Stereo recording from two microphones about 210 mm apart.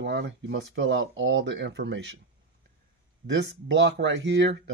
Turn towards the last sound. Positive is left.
turn(degrees=-55)  # may be behind; listen again after turning